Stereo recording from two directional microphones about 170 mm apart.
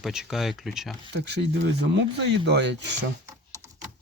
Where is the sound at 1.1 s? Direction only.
85° right.